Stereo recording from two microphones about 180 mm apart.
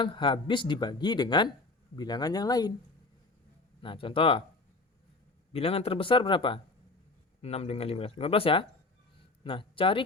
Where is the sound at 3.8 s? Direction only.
30° left (ahead or behind).